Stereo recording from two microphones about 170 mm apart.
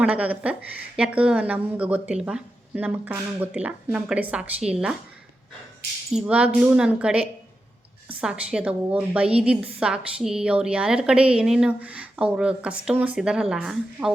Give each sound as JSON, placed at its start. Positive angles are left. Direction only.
{"t": 0.0, "sound": "a woman's voice", "side_deg": -10}
{"t": 6.1, "sound": "a woman's voice", "side_deg": -5}